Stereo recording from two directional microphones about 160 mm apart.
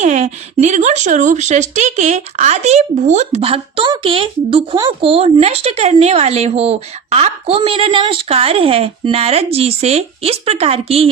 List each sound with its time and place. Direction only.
0.0 s speech: 45° right (ahead or behind)